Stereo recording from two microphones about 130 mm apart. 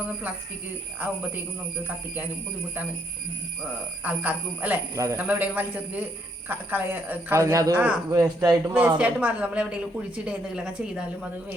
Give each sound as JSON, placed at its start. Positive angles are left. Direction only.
{"t": 0.1, "sound": "a woman's voice", "side_deg": -10}
{"t": 3.6, "sound": "a woman's voice", "side_deg": -10}
{"t": 4.9, "sound": "speech", "side_deg": -25}
{"t": 5.2, "sound": "a woman's voice", "side_deg": -15}
{"t": 8.7, "sound": "a woman's voice", "side_deg": -10}